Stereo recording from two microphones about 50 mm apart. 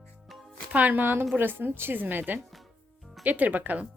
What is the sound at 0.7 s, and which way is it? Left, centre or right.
Speech, right.